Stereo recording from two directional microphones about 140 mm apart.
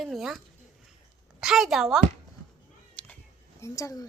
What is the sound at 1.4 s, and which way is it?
Speech, centre (ahead or behind).